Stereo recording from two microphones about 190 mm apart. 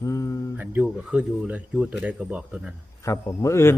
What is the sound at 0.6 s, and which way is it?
Speech, 10° right (ahead or behind).